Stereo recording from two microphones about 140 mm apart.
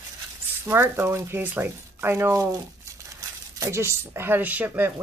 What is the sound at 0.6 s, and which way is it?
Speech, 15° right (ahead or behind).